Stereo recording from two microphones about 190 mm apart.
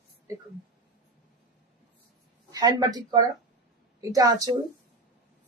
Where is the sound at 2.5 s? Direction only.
20° right (ahead or behind).